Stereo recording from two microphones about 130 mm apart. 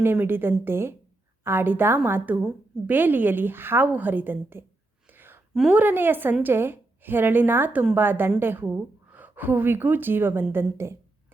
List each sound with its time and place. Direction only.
0.0 s a woman's voice: 15° right (ahead or behind)
5.0 s a sound: 15° right (ahead or behind)
5.5 s a woman's voice: 10° right (ahead or behind)